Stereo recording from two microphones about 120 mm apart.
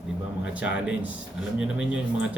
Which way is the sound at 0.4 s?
10° right (ahead or behind).